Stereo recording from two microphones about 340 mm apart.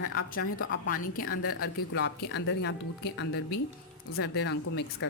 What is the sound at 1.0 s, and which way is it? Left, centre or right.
Speech, left.